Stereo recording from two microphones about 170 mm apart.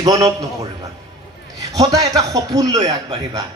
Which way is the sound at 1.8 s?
20° right (ahead or behind).